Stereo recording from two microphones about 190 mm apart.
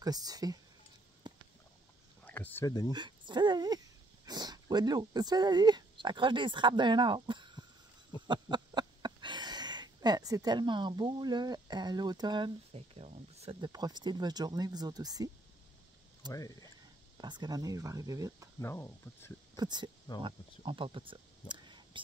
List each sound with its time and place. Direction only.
0.0 s speech: 20° right (ahead or behind)
1.3 s a sound: 25° right (ahead or behind)
2.2 s a sound: 10° left (ahead or behind)
2.9 s speech: 25° right (ahead or behind)
16.3 s speech: 20° left (ahead or behind)
17.2 s speech: 20° right (ahead or behind)
18.6 s speech: 10° left (ahead or behind)
19.5 s speech: 20° right (ahead or behind)